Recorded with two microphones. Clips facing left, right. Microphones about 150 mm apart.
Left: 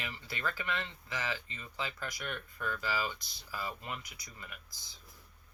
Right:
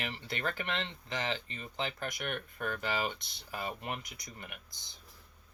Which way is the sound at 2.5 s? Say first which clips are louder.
Even; 65° right (ahead or behind).